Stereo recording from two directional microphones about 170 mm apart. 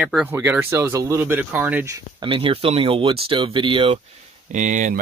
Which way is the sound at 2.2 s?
30° right (ahead or behind).